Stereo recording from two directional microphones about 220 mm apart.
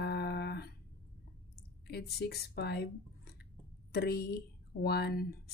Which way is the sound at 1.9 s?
45° left (ahead or behind).